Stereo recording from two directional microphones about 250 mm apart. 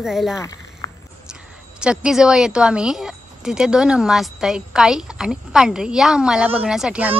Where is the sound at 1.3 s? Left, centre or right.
Centre.